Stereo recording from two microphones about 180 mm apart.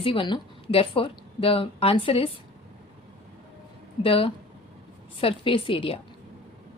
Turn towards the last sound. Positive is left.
turn(degrees=30)  # may be behind; listen again after turning